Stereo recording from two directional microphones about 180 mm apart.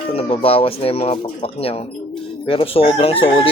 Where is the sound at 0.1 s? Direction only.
30° left (ahead or behind).